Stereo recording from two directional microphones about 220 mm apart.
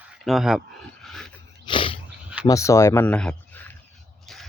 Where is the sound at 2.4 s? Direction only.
15° left (ahead or behind).